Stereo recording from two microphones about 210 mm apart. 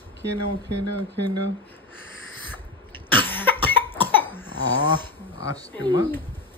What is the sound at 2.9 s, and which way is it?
Cough, 10° left (ahead or behind).